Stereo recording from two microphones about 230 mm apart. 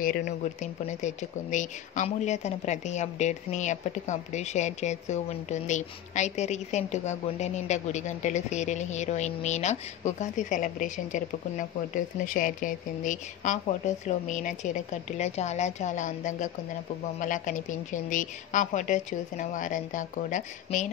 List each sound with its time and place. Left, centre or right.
0.0 s speech: left